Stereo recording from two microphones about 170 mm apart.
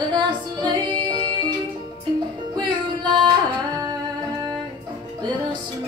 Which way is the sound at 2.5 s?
25° right (ahead or behind).